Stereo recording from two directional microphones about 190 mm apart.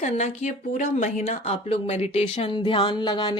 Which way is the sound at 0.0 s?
35° left (ahead or behind).